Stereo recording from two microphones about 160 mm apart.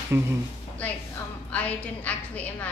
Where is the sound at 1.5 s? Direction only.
10° left (ahead or behind).